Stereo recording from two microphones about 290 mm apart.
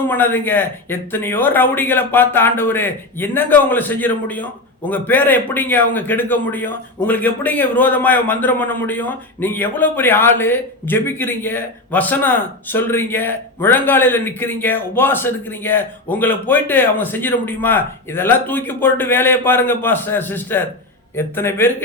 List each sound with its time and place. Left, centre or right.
0.1 s speech: centre